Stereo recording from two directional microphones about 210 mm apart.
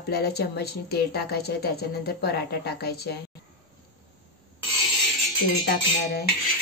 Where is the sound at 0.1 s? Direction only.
50° left (ahead or behind).